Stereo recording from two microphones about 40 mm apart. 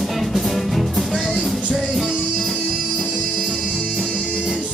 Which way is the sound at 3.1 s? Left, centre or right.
Left.